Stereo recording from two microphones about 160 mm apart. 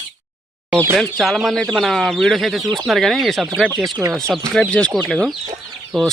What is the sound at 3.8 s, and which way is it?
Speech, 20° right (ahead or behind).